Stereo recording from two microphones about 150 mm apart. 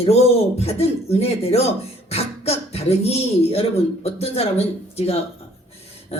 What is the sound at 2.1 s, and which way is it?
Beatboxing, 45° left (ahead or behind).